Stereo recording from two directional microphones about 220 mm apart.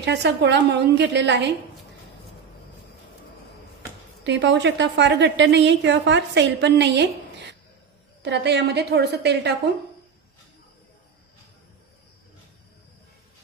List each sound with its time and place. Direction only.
0.0 s a woman's voice: 50° right (ahead or behind)
4.2 s a woman's voice: 55° right (ahead or behind)
8.2 s a woman's voice: 50° right (ahead or behind)